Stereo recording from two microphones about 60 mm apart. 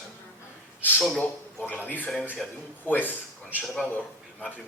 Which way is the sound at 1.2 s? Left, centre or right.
Left.